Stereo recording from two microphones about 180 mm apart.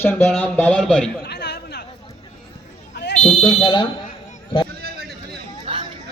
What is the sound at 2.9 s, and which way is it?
Fire alarm, 70° left (ahead or behind).